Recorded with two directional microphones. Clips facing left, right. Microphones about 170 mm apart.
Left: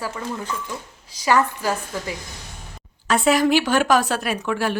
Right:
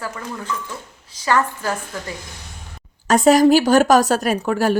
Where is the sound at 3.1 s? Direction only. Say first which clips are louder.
Right 5 dB; 40° right (ahead or behind).